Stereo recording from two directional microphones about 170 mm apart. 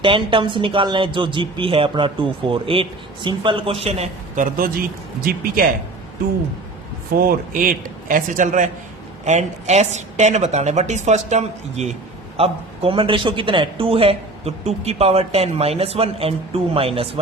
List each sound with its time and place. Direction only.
0.0 s speech: 30° right (ahead or behind)
4.4 s speech: 60° right (ahead or behind)
7.2 s a woman's voice: 55° right (ahead or behind); by 17.1 s 35° right (ahead or behind)